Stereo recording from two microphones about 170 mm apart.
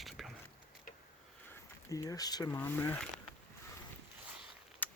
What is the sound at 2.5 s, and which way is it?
Speech, 10° left (ahead or behind).